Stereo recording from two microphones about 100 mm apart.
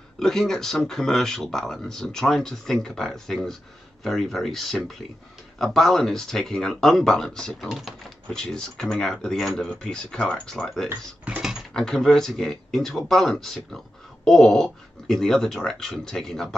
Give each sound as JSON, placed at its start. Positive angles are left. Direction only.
{"t": 0.2, "sound": "speech", "side_deg": 5}
{"t": 10.9, "sound": "speech", "side_deg": -20}
{"t": 11.4, "sound": "speech", "side_deg": 5}